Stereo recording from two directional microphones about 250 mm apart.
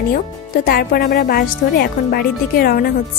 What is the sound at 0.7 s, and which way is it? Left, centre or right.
A woman's voice, left.